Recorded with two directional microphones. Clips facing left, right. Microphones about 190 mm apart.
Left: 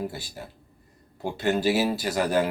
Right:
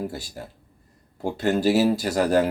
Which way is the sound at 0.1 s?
45° right (ahead or behind).